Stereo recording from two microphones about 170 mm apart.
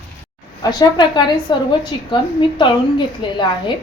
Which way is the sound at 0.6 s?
25° left (ahead or behind).